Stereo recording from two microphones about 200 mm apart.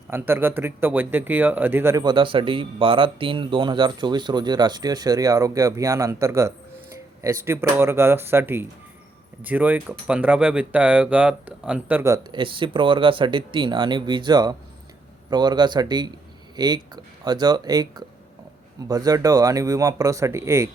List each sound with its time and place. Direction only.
0.1 s speech: 10° right (ahead or behind)